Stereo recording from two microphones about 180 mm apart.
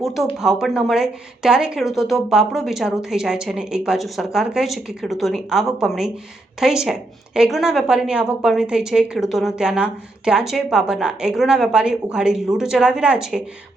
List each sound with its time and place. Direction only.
0.0 s speech: centre (ahead or behind)